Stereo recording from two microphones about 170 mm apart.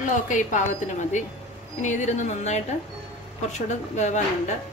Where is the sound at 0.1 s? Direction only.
45° left (ahead or behind).